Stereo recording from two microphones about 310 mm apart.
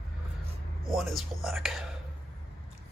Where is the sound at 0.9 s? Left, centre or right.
Centre.